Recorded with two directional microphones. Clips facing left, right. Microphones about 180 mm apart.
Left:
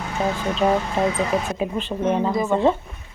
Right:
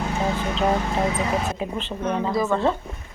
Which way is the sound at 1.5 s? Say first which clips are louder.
Left 4 dB; 20° left (ahead or behind).